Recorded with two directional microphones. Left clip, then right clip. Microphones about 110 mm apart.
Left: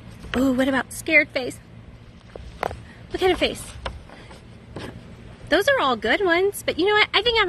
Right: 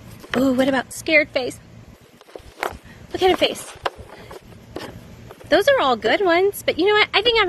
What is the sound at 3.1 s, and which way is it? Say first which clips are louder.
Speech: right 3 dB; 20° left (ahead or behind).